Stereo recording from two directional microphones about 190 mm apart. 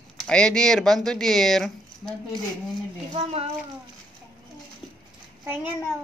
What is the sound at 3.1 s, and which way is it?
Speech, 30° right (ahead or behind).